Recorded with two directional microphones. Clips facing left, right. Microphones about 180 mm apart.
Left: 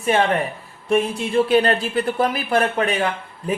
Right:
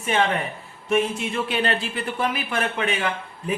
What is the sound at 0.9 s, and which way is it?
Speech, 35° left (ahead or behind).